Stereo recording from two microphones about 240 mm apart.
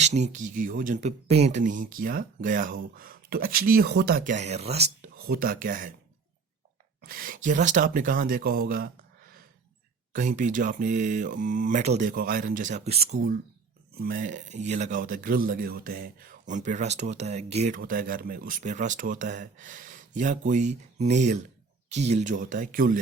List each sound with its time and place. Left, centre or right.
0.0 s speech: right
5.1 s speech: right
7.0 s speech: right
10.1 s speech: right
13.1 s speech: right